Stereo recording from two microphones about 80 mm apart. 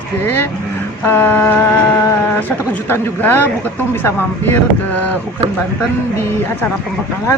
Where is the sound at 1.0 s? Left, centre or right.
Left.